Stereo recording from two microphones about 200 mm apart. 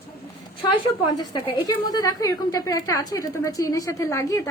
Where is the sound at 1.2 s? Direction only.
20° left (ahead or behind).